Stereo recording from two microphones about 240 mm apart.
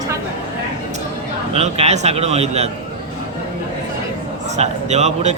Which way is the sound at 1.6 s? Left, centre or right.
Right.